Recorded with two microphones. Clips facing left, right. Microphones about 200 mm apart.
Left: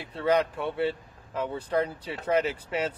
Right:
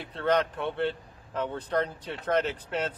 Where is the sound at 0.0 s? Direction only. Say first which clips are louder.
Left 1 dB; 5° left (ahead or behind).